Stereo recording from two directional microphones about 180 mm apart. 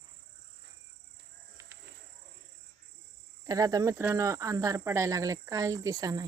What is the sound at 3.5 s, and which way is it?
Speech, 20° right (ahead or behind).